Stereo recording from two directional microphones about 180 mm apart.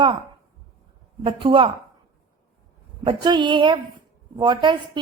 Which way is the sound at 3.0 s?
25° right (ahead or behind).